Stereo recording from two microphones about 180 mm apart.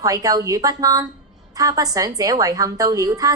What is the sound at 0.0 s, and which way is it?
A woman's voice, 20° right (ahead or behind).